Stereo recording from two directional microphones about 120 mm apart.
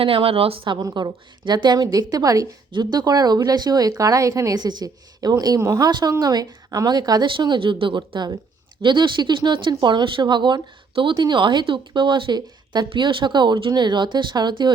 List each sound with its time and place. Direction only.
0.0 s speech: 50° right (ahead or behind)